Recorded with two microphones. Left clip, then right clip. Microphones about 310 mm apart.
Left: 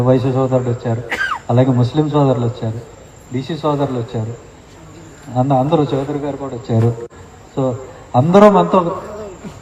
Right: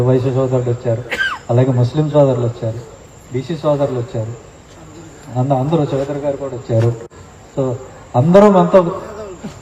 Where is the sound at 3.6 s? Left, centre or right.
Centre.